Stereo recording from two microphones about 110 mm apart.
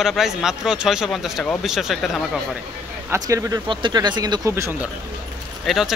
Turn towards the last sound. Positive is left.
turn(degrees=0)  # may be behind; listen again after turning